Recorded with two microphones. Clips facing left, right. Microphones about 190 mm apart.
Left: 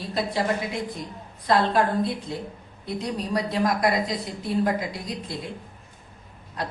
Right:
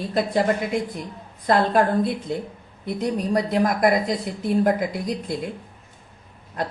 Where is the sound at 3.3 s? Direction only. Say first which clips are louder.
Right 2 dB; 50° right (ahead or behind).